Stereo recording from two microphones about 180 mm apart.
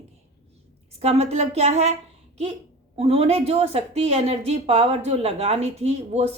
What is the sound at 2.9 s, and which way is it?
Speech, 35° right (ahead or behind).